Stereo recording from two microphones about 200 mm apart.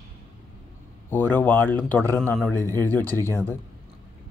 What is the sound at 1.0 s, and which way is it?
Speech, 10° left (ahead or behind).